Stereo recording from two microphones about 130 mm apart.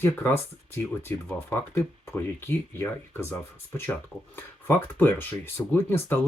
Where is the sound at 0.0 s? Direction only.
20° left (ahead or behind).